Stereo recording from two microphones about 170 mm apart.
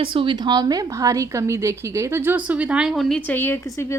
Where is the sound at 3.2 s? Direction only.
10° left (ahead or behind).